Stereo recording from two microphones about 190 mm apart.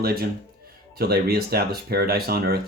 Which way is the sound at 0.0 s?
55° right (ahead or behind).